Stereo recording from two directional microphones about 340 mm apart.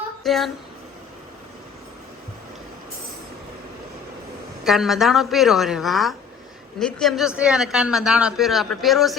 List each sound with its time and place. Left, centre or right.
0.2 s speech: centre
4.6 s a man's voice: centre